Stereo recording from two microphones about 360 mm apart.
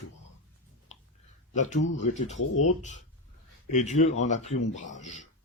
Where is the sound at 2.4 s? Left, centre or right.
Left.